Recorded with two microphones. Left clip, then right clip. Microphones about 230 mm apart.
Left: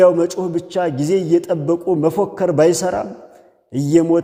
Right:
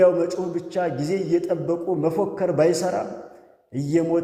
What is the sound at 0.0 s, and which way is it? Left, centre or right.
A man's voice, left.